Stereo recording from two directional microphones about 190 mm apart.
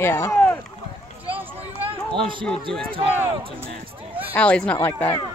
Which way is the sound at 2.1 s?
25° right (ahead or behind).